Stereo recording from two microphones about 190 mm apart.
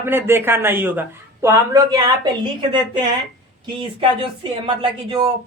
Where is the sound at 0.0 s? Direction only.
10° right (ahead or behind).